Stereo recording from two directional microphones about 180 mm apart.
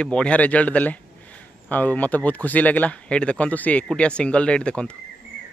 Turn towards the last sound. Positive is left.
turn(degrees=5)  # may be behind; listen again after turning